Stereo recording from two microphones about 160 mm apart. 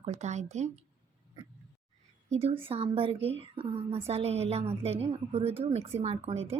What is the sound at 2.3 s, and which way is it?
A woman's voice, 40° right (ahead or behind).